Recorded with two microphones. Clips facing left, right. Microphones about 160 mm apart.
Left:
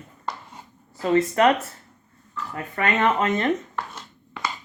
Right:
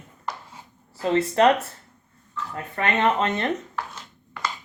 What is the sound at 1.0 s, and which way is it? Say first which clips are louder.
Speech: even; 30° right (ahead or behind).